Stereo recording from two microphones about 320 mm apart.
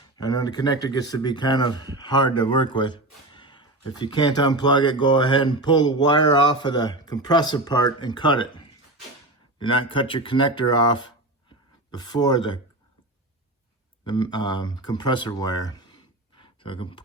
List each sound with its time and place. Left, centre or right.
0.2 s speech: centre
14.0 s speech: centre